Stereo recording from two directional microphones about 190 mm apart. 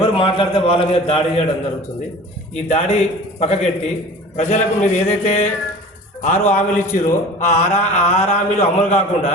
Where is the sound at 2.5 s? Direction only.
35° left (ahead or behind).